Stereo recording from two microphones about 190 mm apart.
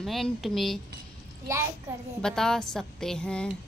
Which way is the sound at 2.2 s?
5° left (ahead or behind).